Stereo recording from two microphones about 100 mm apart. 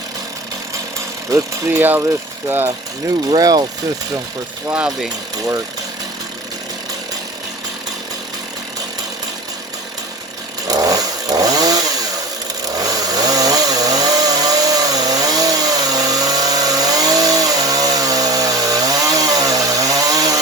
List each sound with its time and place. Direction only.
1.3 s speech: 30° right (ahead or behind)
3.2 s speech: 40° right (ahead or behind)
10.7 s chainsaw: 40° right (ahead or behind)